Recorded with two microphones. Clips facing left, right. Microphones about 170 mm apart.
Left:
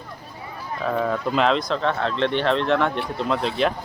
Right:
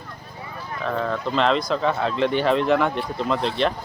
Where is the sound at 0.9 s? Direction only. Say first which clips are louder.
Left 2 dB; 5° left (ahead or behind).